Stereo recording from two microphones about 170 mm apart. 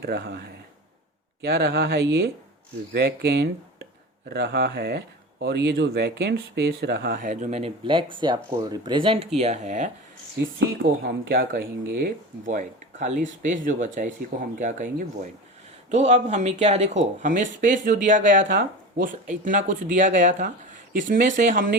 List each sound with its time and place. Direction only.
0.0 s speech: 75° right (ahead or behind); by 9.9 s 45° right (ahead or behind)
10.6 s speech: 90° right; by 21.8 s 55° right (ahead or behind)